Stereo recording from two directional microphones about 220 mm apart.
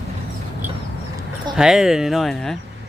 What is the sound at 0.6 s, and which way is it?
Vehicle, 10° right (ahead or behind).